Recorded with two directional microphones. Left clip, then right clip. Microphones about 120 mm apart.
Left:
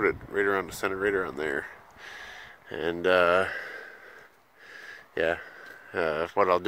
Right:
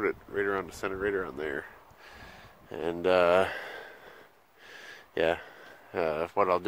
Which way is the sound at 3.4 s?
45° right (ahead or behind).